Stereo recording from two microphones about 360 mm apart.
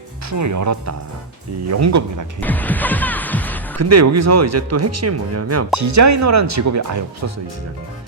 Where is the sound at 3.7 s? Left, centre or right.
Right.